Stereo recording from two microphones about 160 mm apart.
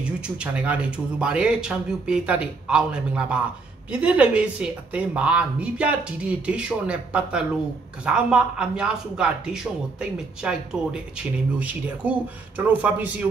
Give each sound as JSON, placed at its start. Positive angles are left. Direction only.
{"t": 0.4, "sound": "speech", "side_deg": -5}